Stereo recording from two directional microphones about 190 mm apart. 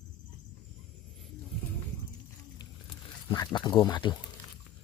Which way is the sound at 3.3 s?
20° left (ahead or behind).